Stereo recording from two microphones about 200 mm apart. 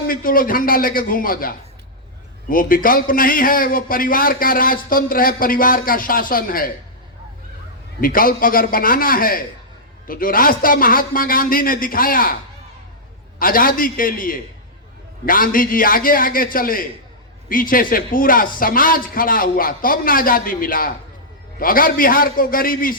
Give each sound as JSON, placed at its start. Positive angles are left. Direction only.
{"t": 0.1, "sound": "a man's voice", "side_deg": 45}
{"t": 8.0, "sound": "a man's voice", "side_deg": 45}
{"t": 13.4, "sound": "a man's voice", "side_deg": 45}